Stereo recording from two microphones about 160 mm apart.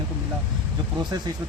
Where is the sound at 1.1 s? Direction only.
25° right (ahead or behind).